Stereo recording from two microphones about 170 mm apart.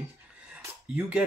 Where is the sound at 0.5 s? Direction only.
5° right (ahead or behind).